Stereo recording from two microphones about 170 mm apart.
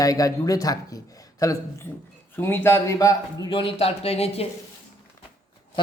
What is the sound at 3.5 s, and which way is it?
Speech, 30° left (ahead or behind).